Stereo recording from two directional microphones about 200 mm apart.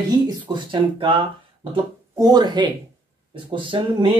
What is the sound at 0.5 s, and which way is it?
Speech, 25° right (ahead or behind).